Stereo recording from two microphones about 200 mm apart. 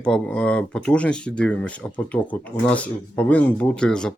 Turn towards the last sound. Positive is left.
turn(degrees=5)  # may be behind; listen again after turning